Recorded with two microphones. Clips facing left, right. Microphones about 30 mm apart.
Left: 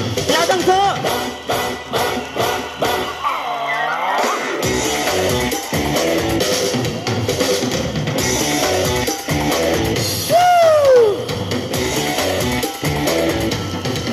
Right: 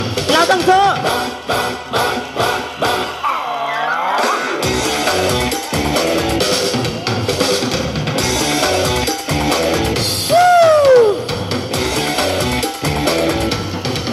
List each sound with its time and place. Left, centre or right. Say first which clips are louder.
0.3 s music: right 3 dB; right
4.2 s music: right 2 dB; right
10.3 s music: right 2 dB; right
12.0 s music: right 2 dB; right